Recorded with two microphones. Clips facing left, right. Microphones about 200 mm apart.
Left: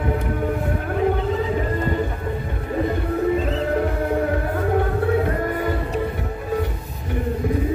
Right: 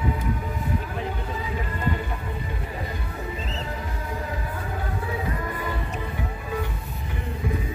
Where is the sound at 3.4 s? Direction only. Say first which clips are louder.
Left 12 dB; 55° left (ahead or behind).